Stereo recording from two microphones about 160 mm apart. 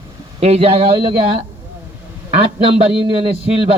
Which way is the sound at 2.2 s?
35° right (ahead or behind).